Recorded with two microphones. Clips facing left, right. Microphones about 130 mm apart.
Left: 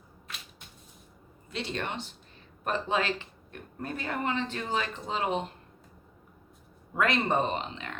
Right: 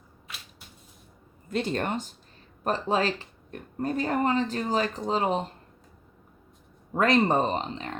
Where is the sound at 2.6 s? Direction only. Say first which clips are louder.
Right 3 dB; 35° right (ahead or behind).